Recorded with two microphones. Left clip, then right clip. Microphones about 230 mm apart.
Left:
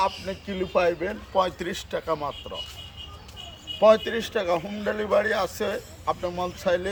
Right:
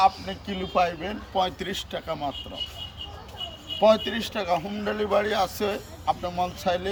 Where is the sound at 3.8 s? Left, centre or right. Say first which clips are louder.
Left 2 dB; centre.